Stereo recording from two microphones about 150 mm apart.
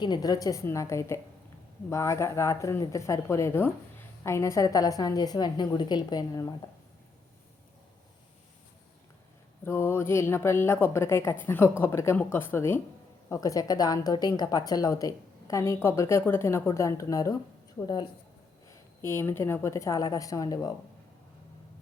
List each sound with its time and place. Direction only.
0.0 s a woman's voice: 30° left (ahead or behind)
9.6 s a woman's voice: 15° left (ahead or behind)
18.7 s a woman's voice: 15° left (ahead or behind)